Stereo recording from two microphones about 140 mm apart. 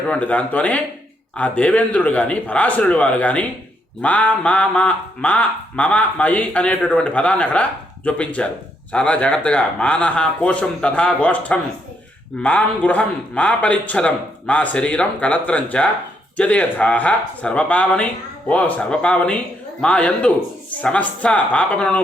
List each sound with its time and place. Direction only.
0.1 s speech: 10° left (ahead or behind)